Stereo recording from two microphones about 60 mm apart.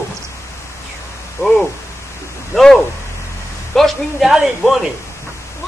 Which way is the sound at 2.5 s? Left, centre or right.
Centre.